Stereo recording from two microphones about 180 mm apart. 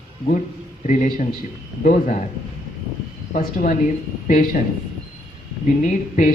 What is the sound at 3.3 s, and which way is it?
Speech, 45° left (ahead or behind).